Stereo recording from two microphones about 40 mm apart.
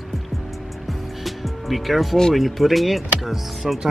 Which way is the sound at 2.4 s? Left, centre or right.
Centre.